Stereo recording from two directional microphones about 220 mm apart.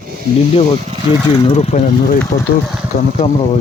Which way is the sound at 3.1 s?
30° left (ahead or behind).